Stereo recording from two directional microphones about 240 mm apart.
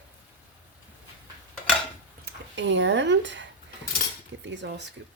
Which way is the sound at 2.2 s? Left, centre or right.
Right.